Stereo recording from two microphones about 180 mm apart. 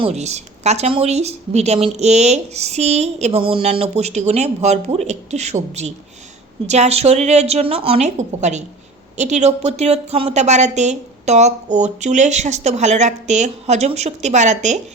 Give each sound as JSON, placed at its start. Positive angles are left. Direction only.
{"t": 0.0, "sound": "a woman's voice", "side_deg": -35}